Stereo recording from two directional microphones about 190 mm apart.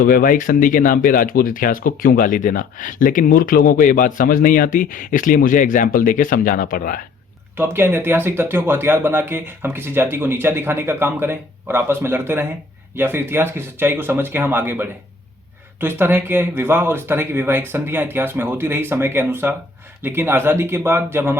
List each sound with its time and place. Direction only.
0.0 s speech: 50° left (ahead or behind)
7.5 s speech: 10° right (ahead or behind)